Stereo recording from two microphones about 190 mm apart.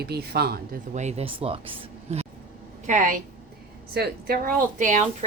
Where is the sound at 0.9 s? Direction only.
35° right (ahead or behind).